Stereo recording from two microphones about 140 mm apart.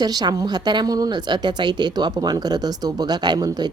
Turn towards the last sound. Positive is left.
turn(degrees=-30)  # may be behind; listen again after turning